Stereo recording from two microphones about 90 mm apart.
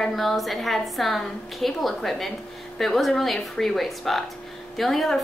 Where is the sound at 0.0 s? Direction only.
Centre (ahead or behind).